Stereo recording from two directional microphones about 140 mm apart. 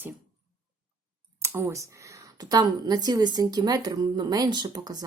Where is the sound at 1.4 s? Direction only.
15° right (ahead or behind).